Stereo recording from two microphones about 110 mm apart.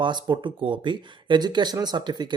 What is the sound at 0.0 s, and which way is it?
Speech, 45° right (ahead or behind).